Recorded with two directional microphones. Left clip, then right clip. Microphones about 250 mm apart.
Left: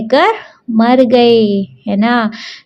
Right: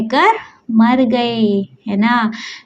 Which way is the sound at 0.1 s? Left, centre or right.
Left.